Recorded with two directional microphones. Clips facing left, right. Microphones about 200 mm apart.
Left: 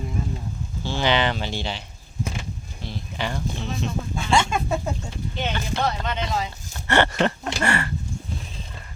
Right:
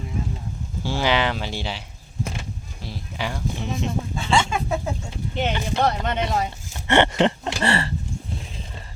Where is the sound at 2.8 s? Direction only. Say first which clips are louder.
Even; 5° right (ahead or behind).